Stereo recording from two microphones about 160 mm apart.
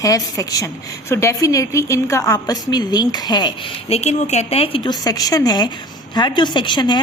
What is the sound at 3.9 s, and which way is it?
A woman's voice, 40° left (ahead or behind).